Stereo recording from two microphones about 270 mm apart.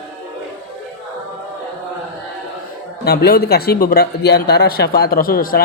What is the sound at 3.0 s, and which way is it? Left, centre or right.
Speech, left.